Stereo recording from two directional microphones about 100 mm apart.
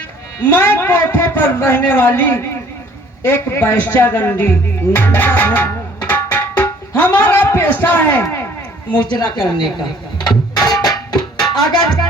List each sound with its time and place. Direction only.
0.5 s a man's voice: 20° left (ahead or behind)
4.9 s music: 20° left (ahead or behind)
9.0 s a woman's voice: 45° left (ahead or behind)
9.6 s dishes: 45° left (ahead or behind)
11.3 s music: 45° left (ahead or behind)